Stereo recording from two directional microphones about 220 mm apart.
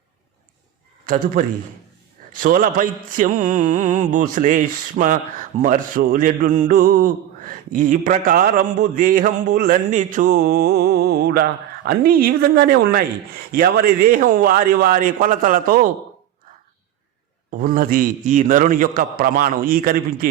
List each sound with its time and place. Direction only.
2.3 s mantra: 40° right (ahead or behind)
11.9 s speech: 40° right (ahead or behind)
13.5 s mantra: 45° right (ahead or behind)
17.6 s mantra: 40° right (ahead or behind)